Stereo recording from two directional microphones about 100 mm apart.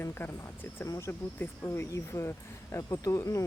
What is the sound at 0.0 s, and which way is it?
Speech, 25° left (ahead or behind).